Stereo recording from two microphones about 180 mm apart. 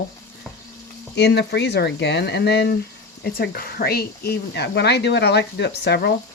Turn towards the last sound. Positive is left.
turn(degrees=65)  # may be behind; listen again after turning